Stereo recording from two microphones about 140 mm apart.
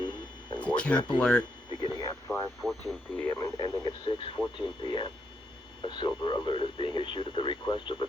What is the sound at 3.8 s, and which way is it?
Speech, 35° left (ahead or behind).